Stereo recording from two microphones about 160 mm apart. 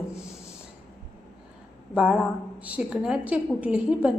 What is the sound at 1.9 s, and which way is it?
A woman's voice, 5° right (ahead or behind).